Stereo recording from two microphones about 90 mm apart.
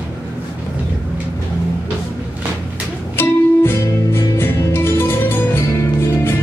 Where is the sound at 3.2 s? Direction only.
25° left (ahead or behind).